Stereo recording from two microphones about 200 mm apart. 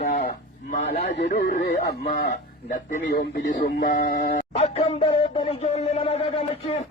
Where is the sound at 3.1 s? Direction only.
55° left (ahead or behind).